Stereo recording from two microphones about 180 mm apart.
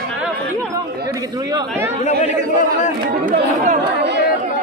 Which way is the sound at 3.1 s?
45° right (ahead or behind).